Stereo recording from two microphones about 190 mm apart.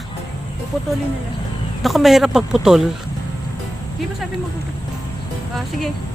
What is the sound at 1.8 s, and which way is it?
A man's voice, centre (ahead or behind).